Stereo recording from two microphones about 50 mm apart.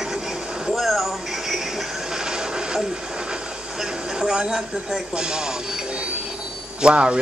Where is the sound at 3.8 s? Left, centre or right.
Centre.